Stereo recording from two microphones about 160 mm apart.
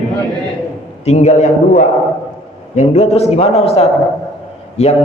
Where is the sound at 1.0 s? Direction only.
45° left (ahead or behind).